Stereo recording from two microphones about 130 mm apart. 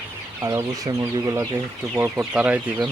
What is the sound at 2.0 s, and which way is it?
Speech, 10° right (ahead or behind).